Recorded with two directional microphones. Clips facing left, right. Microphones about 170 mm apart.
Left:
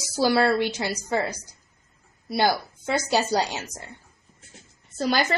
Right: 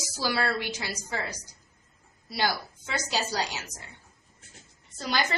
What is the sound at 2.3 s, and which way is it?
Speech, 55° left (ahead or behind).